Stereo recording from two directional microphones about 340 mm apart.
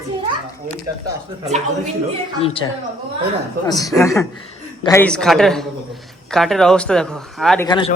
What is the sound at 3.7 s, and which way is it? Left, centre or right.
Speech, centre.